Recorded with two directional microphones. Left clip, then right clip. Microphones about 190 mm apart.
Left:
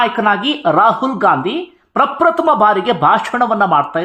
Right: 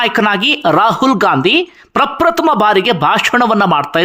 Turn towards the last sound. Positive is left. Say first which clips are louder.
# right 1 dB
turn(degrees=-25)  # may be behind; listen again after turning